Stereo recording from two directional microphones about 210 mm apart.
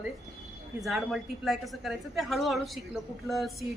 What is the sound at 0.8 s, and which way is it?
A woman's voice, centre (ahead or behind).